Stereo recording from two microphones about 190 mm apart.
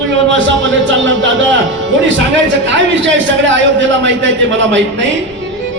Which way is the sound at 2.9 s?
75° right (ahead or behind).